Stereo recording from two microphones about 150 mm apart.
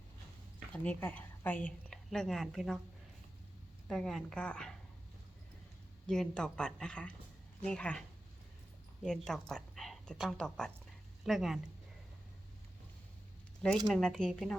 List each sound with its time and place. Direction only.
0.7 s a woman's voice: 10° left (ahead or behind)
3.8 s a woman's voice: centre (ahead or behind)
6.1 s a woman's voice: 5° left (ahead or behind)
9.0 s a woman's voice: 5° left (ahead or behind)
13.9 s a woman's voice: 5° left (ahead or behind)